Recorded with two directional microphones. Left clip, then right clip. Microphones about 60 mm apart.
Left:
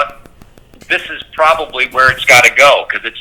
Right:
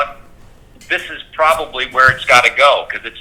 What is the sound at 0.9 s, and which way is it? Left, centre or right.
A man's voice, left.